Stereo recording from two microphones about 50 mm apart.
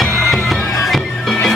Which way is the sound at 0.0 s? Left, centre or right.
Centre.